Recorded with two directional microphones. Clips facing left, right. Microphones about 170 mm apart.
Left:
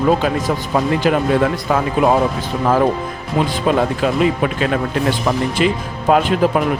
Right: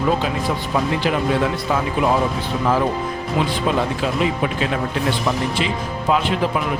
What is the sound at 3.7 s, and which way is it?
Speech, 55° left (ahead or behind).